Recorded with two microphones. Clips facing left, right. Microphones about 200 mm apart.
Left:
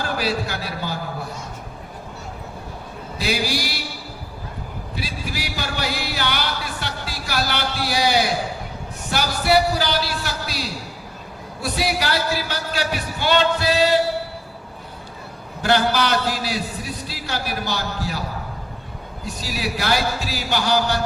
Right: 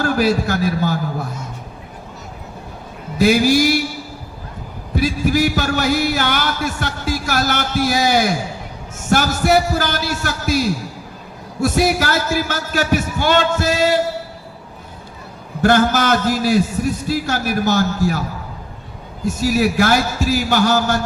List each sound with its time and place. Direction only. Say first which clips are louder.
0.0 s a man's voice: right 7 dB; 45° right (ahead or behind)
3.2 s a man's voice: right 11 dB; 45° right (ahead or behind)
4.9 s a sound: right 14 dB; 45° right (ahead or behind)
9.0 s a man's voice: right 7 dB; 45° right (ahead or behind)
15.6 s a man's voice: right 5 dB; 45° right (ahead or behind)